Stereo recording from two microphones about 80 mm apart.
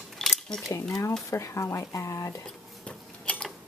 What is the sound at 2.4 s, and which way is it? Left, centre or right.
Dishes, centre.